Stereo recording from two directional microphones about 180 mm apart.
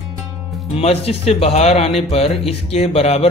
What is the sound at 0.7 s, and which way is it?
Speech, 35° left (ahead or behind).